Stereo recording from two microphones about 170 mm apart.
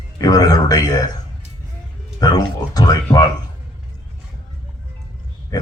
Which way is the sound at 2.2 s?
25° left (ahead or behind).